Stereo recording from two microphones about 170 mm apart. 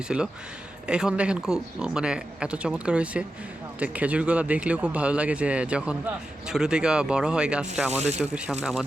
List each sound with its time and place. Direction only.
0.1 s speech: 5° right (ahead or behind)
7.9 s speech: 40° right (ahead or behind)
8.2 s speech: centre (ahead or behind)